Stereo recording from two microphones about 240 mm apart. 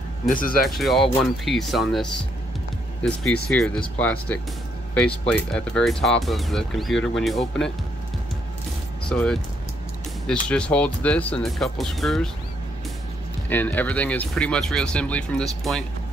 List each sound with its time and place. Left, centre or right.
0.3 s speech: left
0.7 s speech: centre
3.4 s speech: centre
9.1 s speech: centre
13.5 s speech: centre